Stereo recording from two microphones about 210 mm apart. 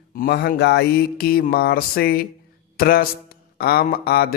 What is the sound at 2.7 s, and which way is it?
Speech, 45° left (ahead or behind).